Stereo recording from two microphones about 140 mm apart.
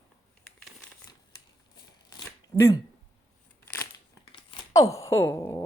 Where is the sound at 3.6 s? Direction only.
20° left (ahead or behind).